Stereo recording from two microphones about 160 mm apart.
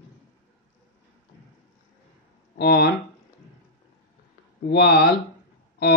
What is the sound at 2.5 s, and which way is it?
Speech, 90° left.